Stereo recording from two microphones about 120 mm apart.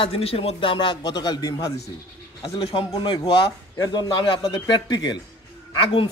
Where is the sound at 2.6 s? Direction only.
45° left (ahead or behind).